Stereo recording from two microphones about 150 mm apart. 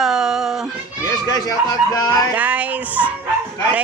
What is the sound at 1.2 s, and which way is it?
Speech, 25° left (ahead or behind).